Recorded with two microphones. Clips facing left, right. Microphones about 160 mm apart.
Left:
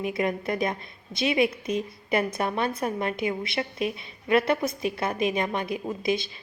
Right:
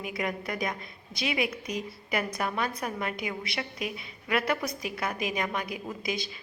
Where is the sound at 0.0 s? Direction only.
25° left (ahead or behind).